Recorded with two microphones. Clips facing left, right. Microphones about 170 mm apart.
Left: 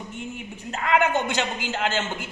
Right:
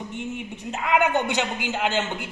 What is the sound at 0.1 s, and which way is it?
A man's voice, 15° right (ahead or behind).